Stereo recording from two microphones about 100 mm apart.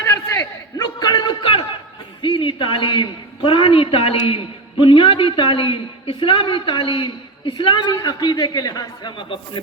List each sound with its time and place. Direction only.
0.8 s a sound: 45° left (ahead or behind); by 1.6 s 60° left (ahead or behind)
2.2 s a man's voice: 55° left (ahead or behind); by 9.1 s 40° left (ahead or behind)
9.1 s a woman's voice: 55° left (ahead or behind)